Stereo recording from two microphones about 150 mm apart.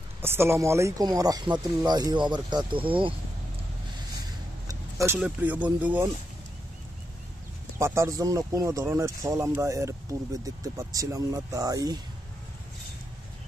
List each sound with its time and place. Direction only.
0.2 s speech: 15° right (ahead or behind); by 3.2 s 35° right (ahead or behind)
4.3 s a sound: 20° right (ahead or behind)
5.2 s speech: 10° right (ahead or behind)
7.8 s speech: 20° right (ahead or behind)